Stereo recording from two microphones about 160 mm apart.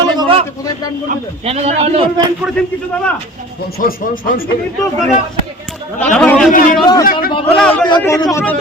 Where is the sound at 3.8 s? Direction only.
65° left (ahead or behind).